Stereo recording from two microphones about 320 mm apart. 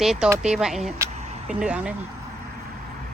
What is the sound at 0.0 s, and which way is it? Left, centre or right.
Speech, centre.